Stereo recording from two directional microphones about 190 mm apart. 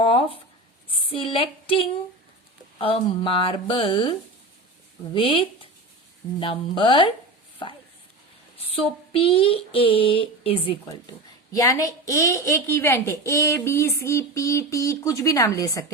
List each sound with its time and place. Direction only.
0.0 s speech: 30° left (ahead or behind)
1.1 s child singing: 30° left (ahead or behind)
5.1 s child singing: 25° left (ahead or behind)
8.7 s child singing: 30° left (ahead or behind)
11.5 s a woman's voice: 15° left (ahead or behind)